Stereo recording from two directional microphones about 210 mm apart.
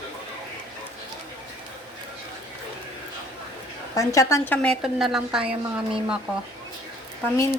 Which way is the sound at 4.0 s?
15° left (ahead or behind).